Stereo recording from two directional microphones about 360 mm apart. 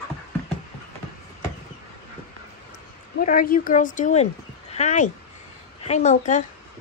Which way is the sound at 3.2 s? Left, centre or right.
Left.